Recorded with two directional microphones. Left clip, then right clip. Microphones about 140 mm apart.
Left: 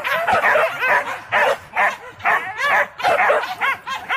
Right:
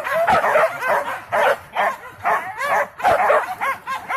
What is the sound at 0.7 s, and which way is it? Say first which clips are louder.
Dog: left 2 dB; 40° right (ahead or behind).